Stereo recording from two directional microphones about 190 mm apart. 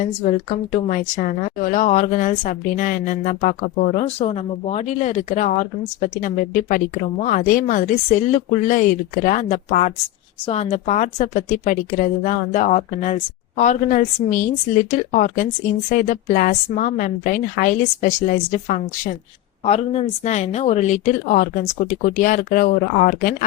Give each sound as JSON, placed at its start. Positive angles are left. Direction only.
{"t": 0.0, "sound": "a woman's voice", "side_deg": 40}